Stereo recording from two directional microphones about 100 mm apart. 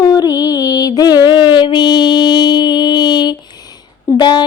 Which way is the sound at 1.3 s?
50° left (ahead or behind).